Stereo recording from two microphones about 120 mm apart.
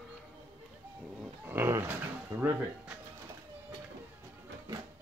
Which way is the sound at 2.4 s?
15° right (ahead or behind).